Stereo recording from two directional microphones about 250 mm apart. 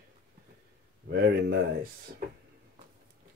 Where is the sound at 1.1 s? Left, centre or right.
Right.